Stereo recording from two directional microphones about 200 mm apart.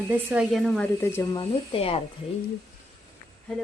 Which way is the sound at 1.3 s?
25° left (ahead or behind).